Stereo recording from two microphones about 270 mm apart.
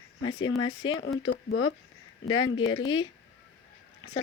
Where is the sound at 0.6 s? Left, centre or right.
Left.